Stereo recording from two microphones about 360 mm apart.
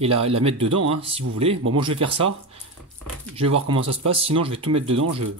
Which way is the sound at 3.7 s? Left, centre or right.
Centre.